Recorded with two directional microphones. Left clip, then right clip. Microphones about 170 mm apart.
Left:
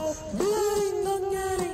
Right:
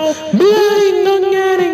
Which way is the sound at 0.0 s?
35° right (ahead or behind).